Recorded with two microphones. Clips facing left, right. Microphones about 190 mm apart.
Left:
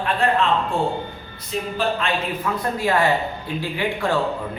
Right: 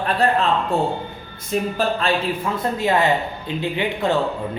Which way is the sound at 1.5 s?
45° right (ahead or behind).